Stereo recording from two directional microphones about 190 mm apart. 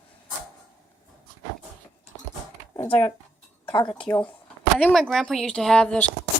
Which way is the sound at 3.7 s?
25° left (ahead or behind).